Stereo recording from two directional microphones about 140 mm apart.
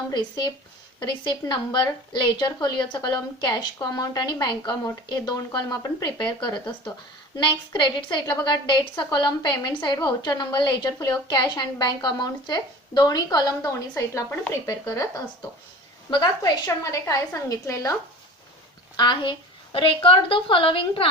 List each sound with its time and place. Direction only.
0.1 s a woman's voice: 30° left (ahead or behind)
18.9 s a woman's voice: 35° left (ahead or behind)